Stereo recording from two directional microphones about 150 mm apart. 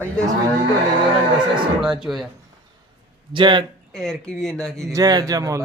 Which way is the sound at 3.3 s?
30° right (ahead or behind).